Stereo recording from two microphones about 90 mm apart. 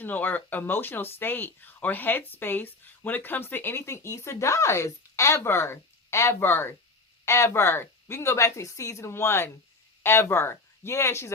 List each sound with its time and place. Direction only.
0.0 s speech: 20° left (ahead or behind)